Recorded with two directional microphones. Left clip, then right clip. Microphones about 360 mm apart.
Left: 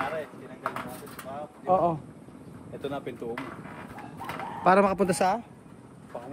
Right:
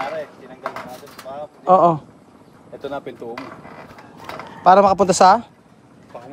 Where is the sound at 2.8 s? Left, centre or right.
Centre.